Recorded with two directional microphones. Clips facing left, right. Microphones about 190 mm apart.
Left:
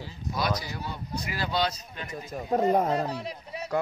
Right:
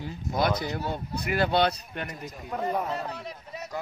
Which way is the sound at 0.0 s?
55° right (ahead or behind).